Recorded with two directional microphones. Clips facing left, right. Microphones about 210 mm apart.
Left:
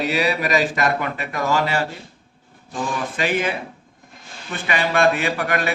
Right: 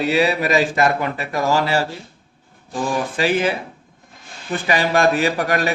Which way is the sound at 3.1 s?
30° right (ahead or behind).